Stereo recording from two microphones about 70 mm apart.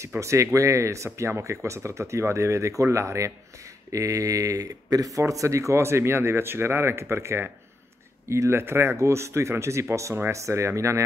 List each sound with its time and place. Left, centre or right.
0.2 s speech: right